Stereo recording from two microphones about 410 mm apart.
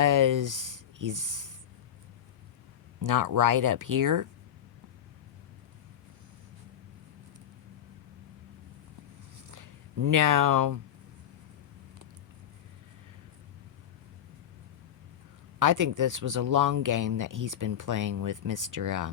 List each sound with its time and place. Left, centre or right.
0.0 s speech: right
3.0 s speech: right
9.5 s a sound: right
15.5 s speech: right